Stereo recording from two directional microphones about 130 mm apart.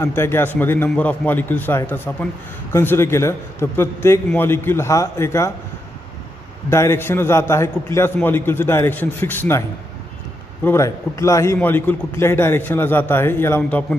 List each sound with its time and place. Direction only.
0.0 s a man's voice: 20° left (ahead or behind)
6.7 s a man's voice: 20° left (ahead or behind)